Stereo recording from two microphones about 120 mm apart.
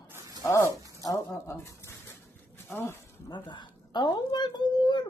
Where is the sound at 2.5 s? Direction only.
20° left (ahead or behind).